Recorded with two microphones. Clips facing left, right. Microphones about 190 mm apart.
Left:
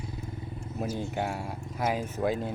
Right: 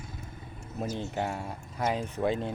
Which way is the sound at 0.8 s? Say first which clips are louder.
Left 1 dB; 5° left (ahead or behind).